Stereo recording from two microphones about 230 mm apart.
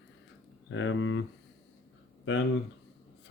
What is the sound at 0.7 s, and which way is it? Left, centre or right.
Speech, left.